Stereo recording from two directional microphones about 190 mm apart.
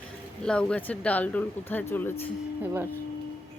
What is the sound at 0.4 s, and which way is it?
Speech, 5° left (ahead or behind).